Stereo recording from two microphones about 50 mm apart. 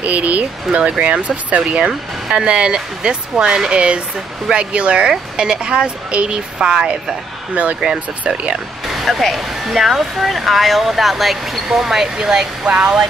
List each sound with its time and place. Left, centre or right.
0.0 s speech: right; by 7.2 s centre
7.5 s speech: right
8.9 s speech: centre
12.6 s speech: right